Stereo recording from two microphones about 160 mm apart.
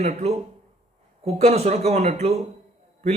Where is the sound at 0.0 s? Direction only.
45° right (ahead or behind).